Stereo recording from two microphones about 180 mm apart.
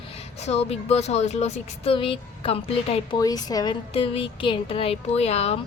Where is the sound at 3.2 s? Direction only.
20° left (ahead or behind).